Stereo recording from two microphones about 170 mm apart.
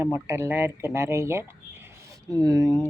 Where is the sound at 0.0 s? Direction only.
15° right (ahead or behind).